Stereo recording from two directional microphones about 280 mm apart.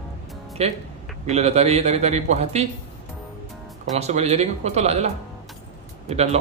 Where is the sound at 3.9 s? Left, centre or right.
Right.